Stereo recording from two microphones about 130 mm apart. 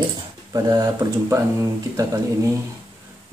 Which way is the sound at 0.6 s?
25° right (ahead or behind).